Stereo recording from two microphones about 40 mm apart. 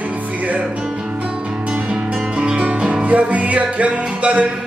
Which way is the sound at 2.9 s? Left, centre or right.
Right.